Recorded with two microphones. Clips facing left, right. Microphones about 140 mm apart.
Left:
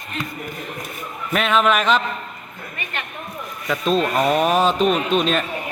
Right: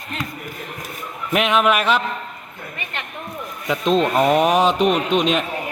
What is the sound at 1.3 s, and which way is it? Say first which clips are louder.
Speech: right 1 dB; 15° right (ahead or behind).